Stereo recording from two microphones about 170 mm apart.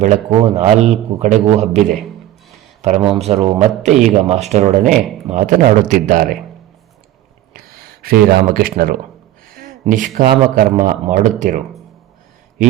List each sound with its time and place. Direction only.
0.0 s a man's voice: 40° right (ahead or behind)
4.9 s speech: centre (ahead or behind)
5.3 s speech: 45° right (ahead or behind)
7.5 s a sound: 60° right (ahead or behind)
9.8 s speech: 50° right (ahead or behind)